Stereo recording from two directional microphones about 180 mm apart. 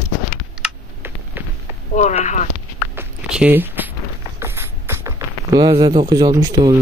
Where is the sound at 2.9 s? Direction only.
10° right (ahead or behind).